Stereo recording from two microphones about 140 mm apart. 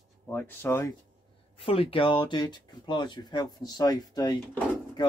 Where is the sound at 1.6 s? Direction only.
40° left (ahead or behind).